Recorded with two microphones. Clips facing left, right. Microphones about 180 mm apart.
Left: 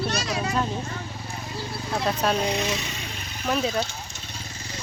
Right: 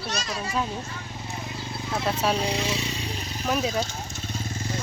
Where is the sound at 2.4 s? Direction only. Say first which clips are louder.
Left 1 dB; 30° right (ahead or behind).